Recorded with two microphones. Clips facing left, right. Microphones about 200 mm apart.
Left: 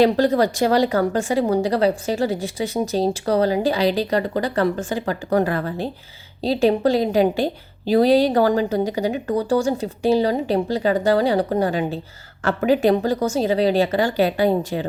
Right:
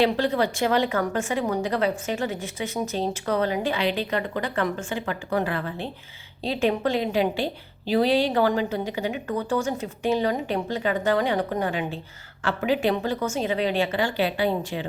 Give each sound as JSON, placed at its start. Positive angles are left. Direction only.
{"t": 0.0, "sound": "a woman's voice", "side_deg": 40}